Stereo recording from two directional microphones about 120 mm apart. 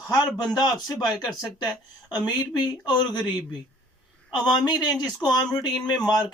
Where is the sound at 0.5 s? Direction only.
35° left (ahead or behind).